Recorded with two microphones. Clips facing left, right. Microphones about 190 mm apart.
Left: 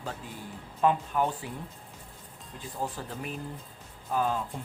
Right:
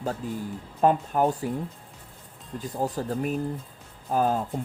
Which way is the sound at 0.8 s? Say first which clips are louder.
Right 4 dB; 40° right (ahead or behind).